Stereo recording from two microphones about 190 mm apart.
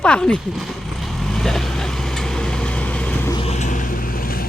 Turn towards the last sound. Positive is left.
turn(degrees=40)  # may be behind; listen again after turning